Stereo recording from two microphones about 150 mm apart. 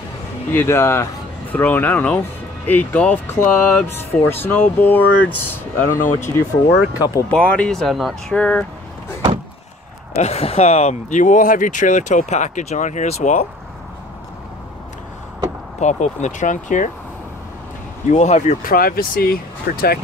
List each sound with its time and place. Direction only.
0.5 s speech: 15° left (ahead or behind)
10.1 s speech: 45° left (ahead or behind)
15.8 s speech: 50° left (ahead or behind)
18.1 s speech: 50° left (ahead or behind)
18.6 s speech: 75° left (ahead or behind)